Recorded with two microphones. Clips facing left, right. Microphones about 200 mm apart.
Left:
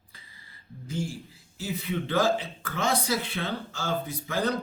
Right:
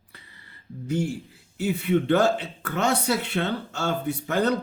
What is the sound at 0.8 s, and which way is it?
A man's voice, 65° right (ahead or behind).